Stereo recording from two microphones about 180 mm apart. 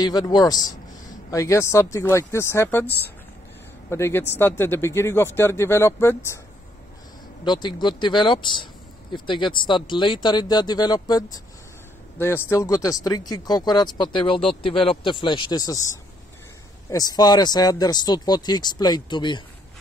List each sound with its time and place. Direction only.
0.0 s a man's voice: 25° left (ahead or behind)
3.9 s a man's voice: 15° left (ahead or behind)
7.4 s speech: 25° left (ahead or behind)
16.9 s speech: 20° left (ahead or behind)